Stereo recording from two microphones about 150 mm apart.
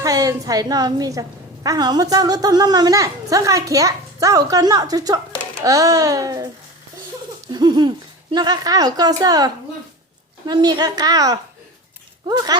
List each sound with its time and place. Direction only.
0.0 s a woman's voice: 20° right (ahead or behind)
7.5 s a woman's voice: 30° right (ahead or behind)